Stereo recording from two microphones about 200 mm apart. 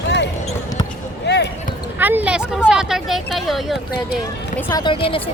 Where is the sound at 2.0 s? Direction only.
10° right (ahead or behind).